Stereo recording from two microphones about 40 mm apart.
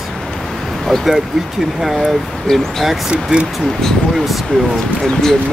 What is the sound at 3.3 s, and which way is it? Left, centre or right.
Speech, right.